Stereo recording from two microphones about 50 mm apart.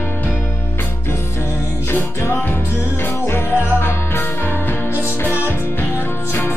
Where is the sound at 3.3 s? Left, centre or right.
Left.